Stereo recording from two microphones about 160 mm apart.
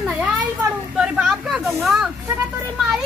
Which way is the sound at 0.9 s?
5° right (ahead or behind).